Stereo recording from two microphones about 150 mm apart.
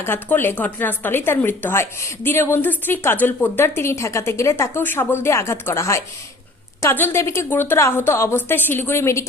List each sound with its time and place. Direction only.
0.0 s speech: 15° left (ahead or behind)